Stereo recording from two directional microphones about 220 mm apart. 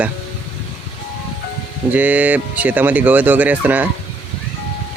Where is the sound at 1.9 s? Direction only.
5° right (ahead or behind).